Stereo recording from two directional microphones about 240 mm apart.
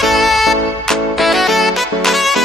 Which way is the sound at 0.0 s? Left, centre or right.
Centre.